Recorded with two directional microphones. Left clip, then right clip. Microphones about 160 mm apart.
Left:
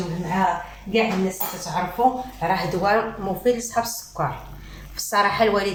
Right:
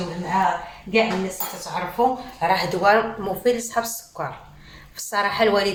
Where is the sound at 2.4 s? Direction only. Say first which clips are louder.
Right 3 dB; 30° right (ahead or behind).